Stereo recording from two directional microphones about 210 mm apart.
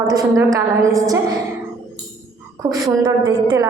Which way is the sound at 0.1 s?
15° right (ahead or behind).